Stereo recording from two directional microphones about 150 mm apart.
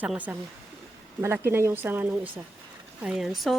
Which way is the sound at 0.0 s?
10° right (ahead or behind).